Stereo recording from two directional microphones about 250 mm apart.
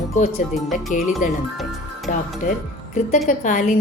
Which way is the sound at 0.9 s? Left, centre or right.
Left.